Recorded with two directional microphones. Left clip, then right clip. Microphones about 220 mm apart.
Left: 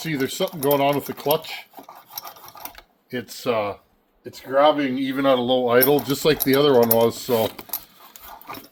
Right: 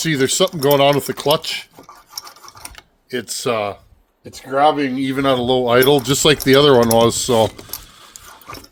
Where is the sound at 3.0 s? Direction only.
60° right (ahead or behind).